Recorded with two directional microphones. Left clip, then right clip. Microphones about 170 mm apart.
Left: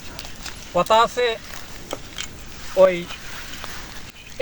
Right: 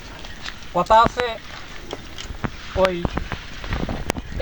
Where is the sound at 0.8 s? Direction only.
25° left (ahead or behind).